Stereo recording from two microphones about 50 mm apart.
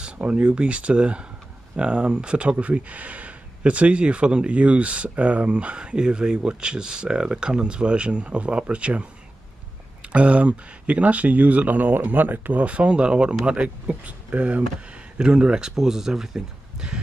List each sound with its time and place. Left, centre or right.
0.0 s speech: right
10.0 s speech: right
12.6 s speech: right